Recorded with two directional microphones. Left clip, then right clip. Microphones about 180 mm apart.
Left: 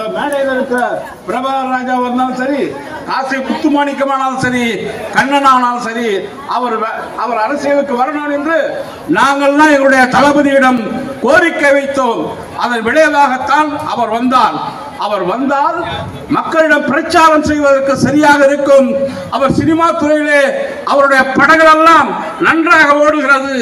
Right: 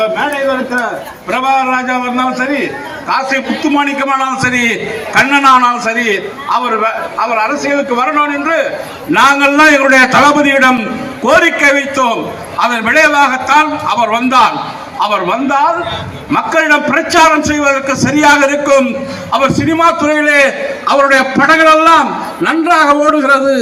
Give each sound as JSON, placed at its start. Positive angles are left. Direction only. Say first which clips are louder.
{"t": 1.7, "sound": "a man's voice", "louder": "right 1 dB", "side_deg": -20}
{"t": 7.3, "sound": "a man's voice", "louder": "left 3 dB", "side_deg": -20}
{"t": 21.1, "sound": "a man's voice", "louder": "even", "side_deg": -55}
{"t": 22.4, "sound": "a man's voice", "louder": "left 1 dB", "side_deg": -75}